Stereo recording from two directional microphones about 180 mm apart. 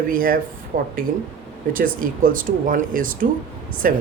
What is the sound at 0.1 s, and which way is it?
Speech, 55° right (ahead or behind).